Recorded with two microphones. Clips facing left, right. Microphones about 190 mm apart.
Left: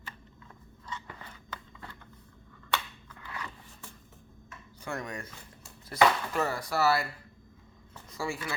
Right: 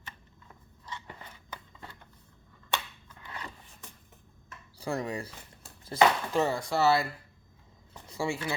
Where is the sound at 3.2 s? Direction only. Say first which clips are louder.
Left 1 dB; 20° right (ahead or behind).